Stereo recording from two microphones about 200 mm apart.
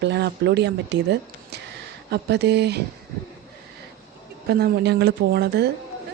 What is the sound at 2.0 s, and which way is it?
Speech, 55° right (ahead or behind).